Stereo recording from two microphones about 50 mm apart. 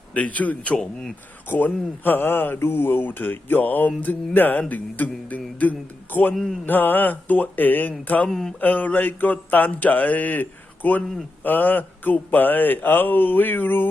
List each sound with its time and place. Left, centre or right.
0.1 s a man's voice: left
1.5 s speech: left
8.3 s speech: centre
8.6 s speech: left